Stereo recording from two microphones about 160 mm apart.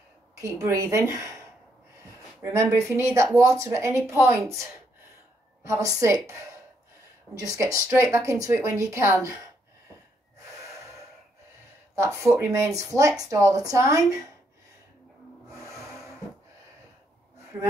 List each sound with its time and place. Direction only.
0.4 s speech: 20° right (ahead or behind)
2.5 s speech: 15° right (ahead or behind)
11.9 s speech: 15° right (ahead or behind)
15.5 s vehicle: 20° right (ahead or behind)